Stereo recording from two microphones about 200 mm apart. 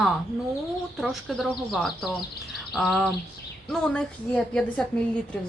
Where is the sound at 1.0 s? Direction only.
Centre (ahead or behind).